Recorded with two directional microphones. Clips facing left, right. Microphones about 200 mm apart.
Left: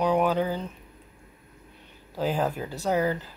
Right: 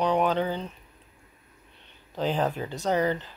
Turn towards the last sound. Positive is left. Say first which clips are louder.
# even
turn(degrees=5)  # may be behind; listen again after turning